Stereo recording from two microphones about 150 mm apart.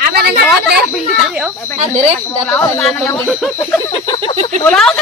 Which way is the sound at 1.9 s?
55° right (ahead or behind).